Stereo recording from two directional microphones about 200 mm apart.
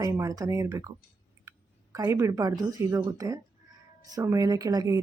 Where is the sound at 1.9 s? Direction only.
15° right (ahead or behind).